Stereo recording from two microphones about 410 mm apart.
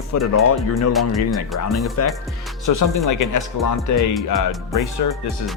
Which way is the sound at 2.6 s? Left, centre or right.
Left.